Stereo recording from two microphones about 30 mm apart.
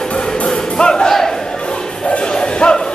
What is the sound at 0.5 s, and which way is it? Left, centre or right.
Crowd, left.